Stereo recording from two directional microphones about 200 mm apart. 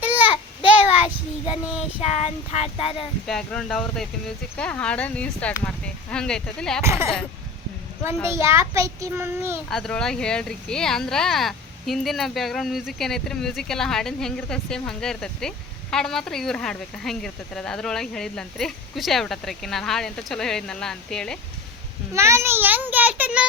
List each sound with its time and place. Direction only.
0.0 s a sound: 10° right (ahead or behind)
0.8 s child singing: 30° left (ahead or behind)
2.0 s speech: 35° left (ahead or behind)
3.2 s speech: centre (ahead or behind)
6.8 s a child's voice: 15° right (ahead or behind)
8.3 s a child's voice: 15° right (ahead or behind)
9.6 s speech: centre (ahead or behind)
22.1 s a child's voice: 15° right (ahead or behind)